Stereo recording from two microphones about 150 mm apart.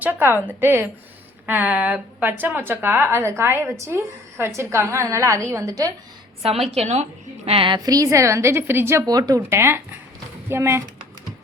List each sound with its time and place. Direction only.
0.0 s a woman's voice: 15° right (ahead or behind)
6.4 s a woman's voice: 40° right (ahead or behind)
7.8 s a woman's voice: 25° right (ahead or behind)